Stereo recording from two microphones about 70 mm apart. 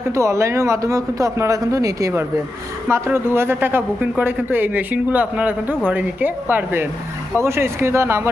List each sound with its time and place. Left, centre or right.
0.1 s speech: right
2.9 s a man's voice: right